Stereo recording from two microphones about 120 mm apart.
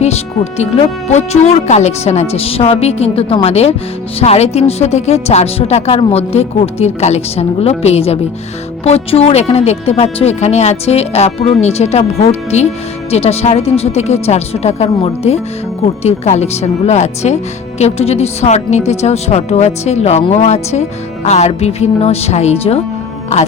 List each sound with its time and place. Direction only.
0.0 s music: 65° left (ahead or behind)
1.0 s speech: 70° left (ahead or behind)
16.0 s speech: 70° left (ahead or behind)